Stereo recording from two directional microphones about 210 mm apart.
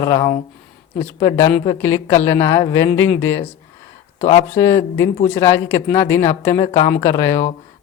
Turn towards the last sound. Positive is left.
turn(degrees=15)  # may be behind; listen again after turning